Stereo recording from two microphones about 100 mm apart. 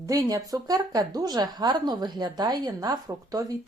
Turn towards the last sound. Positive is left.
turn(degrees=-35)  # may be behind; listen again after turning